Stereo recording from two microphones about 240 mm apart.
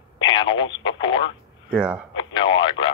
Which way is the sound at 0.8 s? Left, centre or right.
Centre.